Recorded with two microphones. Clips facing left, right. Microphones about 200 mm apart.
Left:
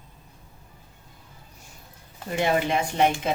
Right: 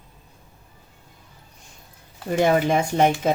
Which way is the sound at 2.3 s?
45° right (ahead or behind).